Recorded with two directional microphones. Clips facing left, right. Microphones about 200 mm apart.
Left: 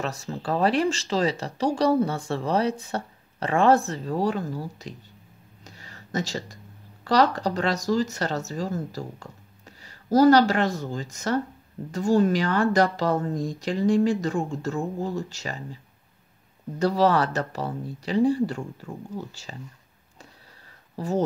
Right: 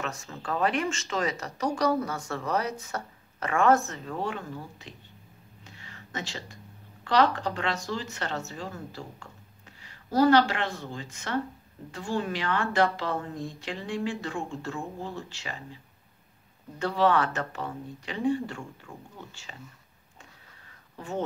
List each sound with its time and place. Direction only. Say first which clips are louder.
0.0 s speech: left 5 dB; 35° left (ahead or behind)
5.6 s a sound: left 2 dB; 40° left (ahead or behind)
7.1 s speech: left 3 dB; 40° left (ahead or behind)
16.7 s speech: left 3 dB; 40° left (ahead or behind)
20.9 s speech: left 8 dB; 35° left (ahead or behind)